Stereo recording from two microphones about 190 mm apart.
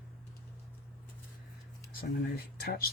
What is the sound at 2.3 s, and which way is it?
Speech, 55° left (ahead or behind).